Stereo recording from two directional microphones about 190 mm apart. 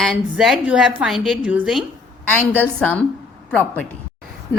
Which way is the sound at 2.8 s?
5° left (ahead or behind).